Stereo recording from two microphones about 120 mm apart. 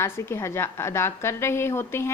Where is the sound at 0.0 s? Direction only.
20° left (ahead or behind).